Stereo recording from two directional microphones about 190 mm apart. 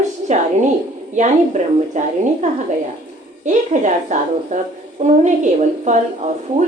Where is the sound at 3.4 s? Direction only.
40° right (ahead or behind).